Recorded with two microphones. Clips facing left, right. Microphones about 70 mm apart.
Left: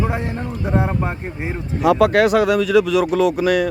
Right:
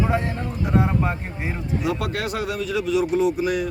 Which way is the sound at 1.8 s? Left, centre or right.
Left.